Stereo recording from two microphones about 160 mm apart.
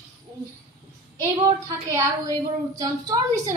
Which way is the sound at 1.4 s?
25° right (ahead or behind).